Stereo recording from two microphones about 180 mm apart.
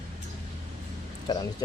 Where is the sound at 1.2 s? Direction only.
20° left (ahead or behind).